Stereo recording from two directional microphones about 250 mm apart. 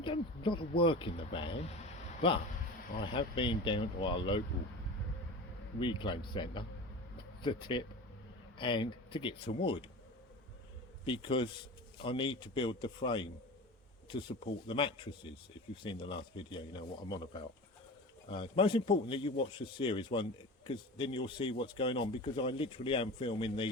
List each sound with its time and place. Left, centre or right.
0.0 s speech: centre
5.8 s speech: centre
11.0 s speech: centre